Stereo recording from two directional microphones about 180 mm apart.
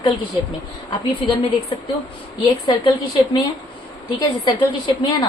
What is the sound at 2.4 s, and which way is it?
Speech, 25° left (ahead or behind).